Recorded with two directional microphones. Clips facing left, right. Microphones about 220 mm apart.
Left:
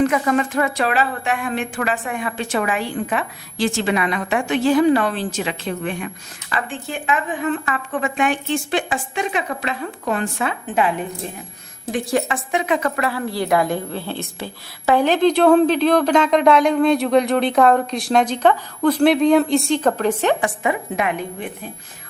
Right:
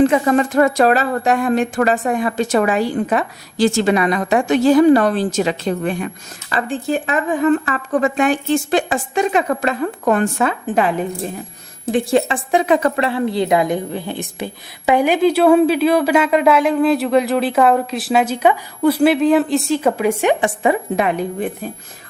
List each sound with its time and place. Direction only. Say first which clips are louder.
0.0 s speech: right 4 dB; 30° right (ahead or behind)
11.9 s speech: right 5 dB; 30° right (ahead or behind)
13.0 s a woman's voice: right 5 dB; 25° right (ahead or behind)
20.4 s speech: right 5 dB; 30° right (ahead or behind)